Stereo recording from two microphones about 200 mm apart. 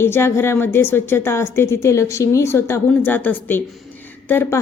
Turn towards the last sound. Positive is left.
turn(degrees=10)  # may be behind; listen again after turning